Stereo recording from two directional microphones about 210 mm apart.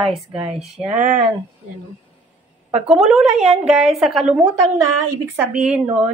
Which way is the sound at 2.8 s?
Centre (ahead or behind).